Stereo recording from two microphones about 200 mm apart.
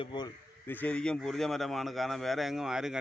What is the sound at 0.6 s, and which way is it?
A man's voice, 10° left (ahead or behind).